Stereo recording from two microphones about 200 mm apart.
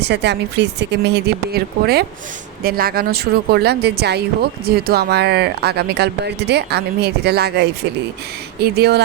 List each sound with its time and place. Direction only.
0.0 s speech: 60° right (ahead or behind)